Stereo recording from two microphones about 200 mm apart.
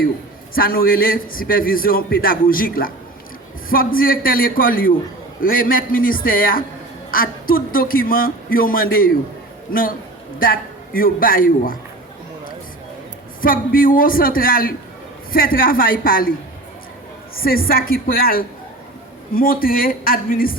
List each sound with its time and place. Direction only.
0.5 s a man's voice: 45° left (ahead or behind)
10.3 s a man's voice: 45° left (ahead or behind)
13.4 s a man's voice: 45° left (ahead or behind)
17.3 s a man's voice: 50° left (ahead or behind)